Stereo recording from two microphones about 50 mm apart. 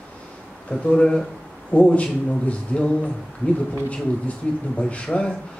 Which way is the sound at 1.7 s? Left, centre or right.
Left.